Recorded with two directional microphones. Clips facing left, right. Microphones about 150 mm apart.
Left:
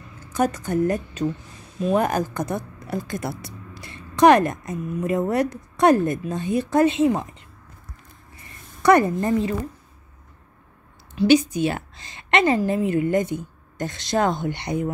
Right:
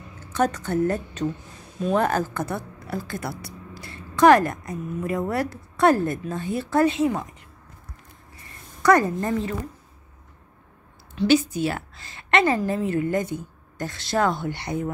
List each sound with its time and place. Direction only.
0.2 s a woman's voice: 10° left (ahead or behind)
8.8 s a woman's voice: 20° left (ahead or behind)
11.1 s a woman's voice: 15° left (ahead or behind)